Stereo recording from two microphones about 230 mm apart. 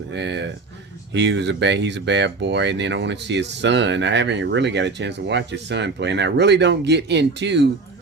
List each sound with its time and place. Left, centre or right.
0.1 s speech: right